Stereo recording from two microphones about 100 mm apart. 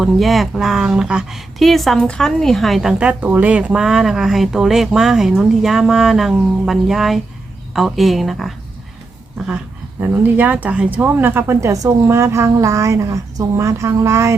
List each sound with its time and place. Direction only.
0.0 s speech: centre (ahead or behind)
3.0 s speech: 15° right (ahead or behind)
10.0 s speech: 20° right (ahead or behind)